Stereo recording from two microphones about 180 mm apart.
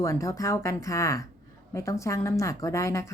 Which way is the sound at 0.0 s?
15° left (ahead or behind).